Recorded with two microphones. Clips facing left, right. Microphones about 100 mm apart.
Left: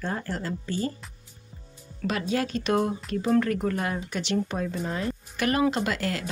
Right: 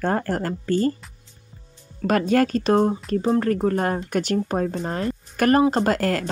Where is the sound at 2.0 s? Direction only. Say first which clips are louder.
Right 8 dB; 50° right (ahead or behind).